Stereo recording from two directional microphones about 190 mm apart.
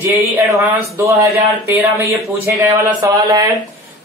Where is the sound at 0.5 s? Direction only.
15° right (ahead or behind).